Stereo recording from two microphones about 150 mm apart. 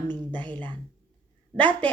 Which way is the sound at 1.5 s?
10° left (ahead or behind).